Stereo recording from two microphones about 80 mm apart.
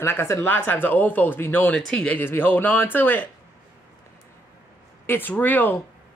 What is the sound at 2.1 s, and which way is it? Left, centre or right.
Speech, left.